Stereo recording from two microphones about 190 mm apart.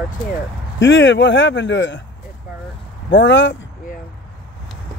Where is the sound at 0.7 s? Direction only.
75° left (ahead or behind).